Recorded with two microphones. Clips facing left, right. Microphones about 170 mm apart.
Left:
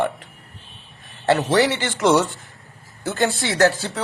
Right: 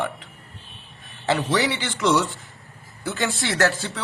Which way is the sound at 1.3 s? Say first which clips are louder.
Left 5 dB; 45° left (ahead or behind).